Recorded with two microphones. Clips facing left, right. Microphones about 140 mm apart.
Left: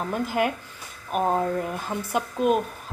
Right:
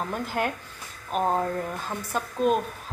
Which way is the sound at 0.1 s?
5° left (ahead or behind).